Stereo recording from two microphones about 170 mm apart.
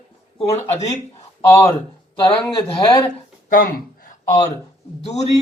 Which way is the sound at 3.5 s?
55° left (ahead or behind).